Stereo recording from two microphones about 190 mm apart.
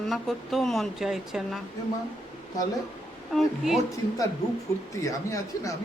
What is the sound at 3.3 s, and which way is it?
Speech, centre (ahead or behind).